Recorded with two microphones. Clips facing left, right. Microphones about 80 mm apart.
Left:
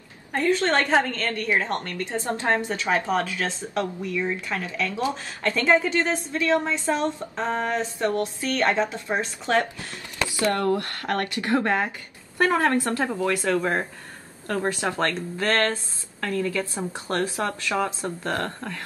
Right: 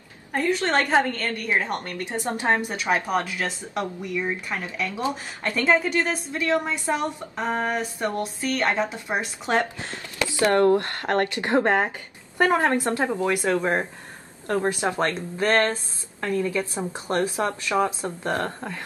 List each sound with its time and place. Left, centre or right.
0.3 s speech: centre
1.1 s speech: centre
10.4 s a woman's voice: right